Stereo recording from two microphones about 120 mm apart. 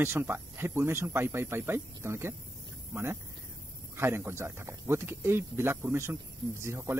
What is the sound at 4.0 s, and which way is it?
Speech, 20° right (ahead or behind).